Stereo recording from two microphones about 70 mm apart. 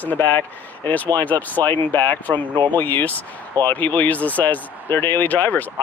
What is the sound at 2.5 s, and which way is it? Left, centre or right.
Speech, right.